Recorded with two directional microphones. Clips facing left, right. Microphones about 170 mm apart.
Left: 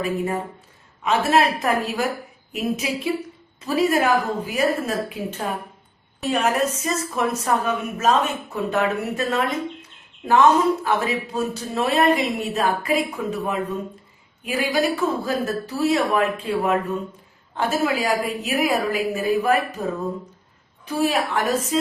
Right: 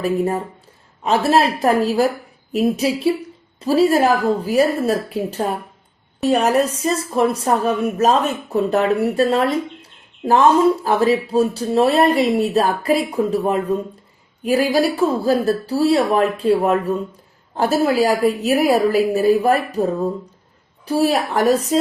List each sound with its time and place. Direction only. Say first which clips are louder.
1.0 s a woman's voice: right 3 dB; 35° right (ahead or behind)